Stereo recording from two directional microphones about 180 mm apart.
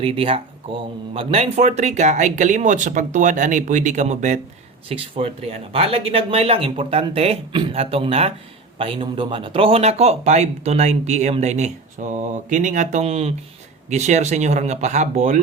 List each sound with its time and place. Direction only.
0.0 s speech: 30° right (ahead or behind)